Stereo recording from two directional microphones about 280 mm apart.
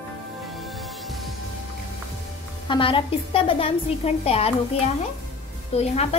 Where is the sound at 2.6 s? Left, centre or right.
Centre.